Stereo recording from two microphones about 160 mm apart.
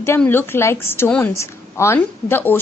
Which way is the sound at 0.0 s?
15° left (ahead or behind).